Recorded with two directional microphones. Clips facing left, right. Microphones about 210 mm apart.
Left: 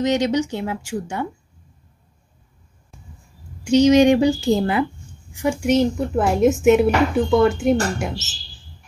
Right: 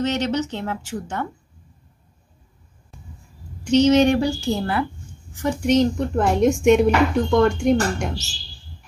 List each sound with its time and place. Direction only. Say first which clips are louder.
0.0 s a woman's voice: left 3 dB; 15° left (ahead or behind)
3.6 s a woman's voice: left 2 dB; 10° left (ahead or behind)